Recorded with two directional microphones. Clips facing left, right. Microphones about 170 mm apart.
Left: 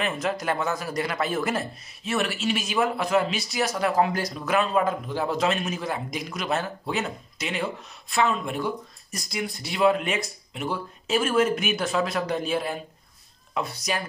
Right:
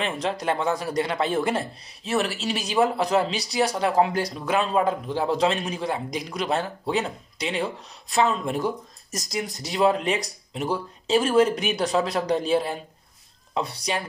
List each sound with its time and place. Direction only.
0.0 s speech: 30° right (ahead or behind)